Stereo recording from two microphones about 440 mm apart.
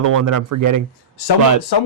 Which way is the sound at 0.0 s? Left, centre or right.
Right.